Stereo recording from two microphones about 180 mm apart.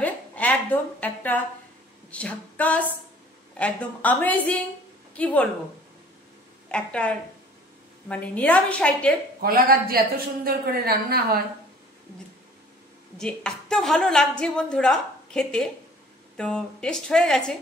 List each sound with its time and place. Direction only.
0.0 s a sound: 10° left (ahead or behind)
3.5 s a woman's voice: 5° left (ahead or behind)
6.7 s a woman's voice: 5° left (ahead or behind)
9.4 s a woman's voice: 55° right (ahead or behind)
13.2 s a woman's voice: 5° left (ahead or behind)